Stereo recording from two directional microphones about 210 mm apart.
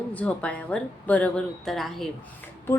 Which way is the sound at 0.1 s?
5° left (ahead or behind).